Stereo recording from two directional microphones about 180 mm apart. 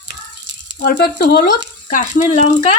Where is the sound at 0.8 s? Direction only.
60° left (ahead or behind).